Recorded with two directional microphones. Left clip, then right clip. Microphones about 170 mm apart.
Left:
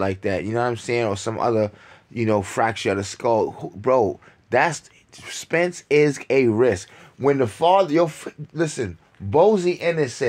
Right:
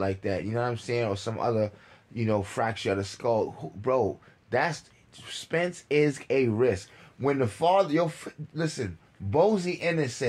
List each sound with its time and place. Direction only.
0.0 s speech: 45° left (ahead or behind)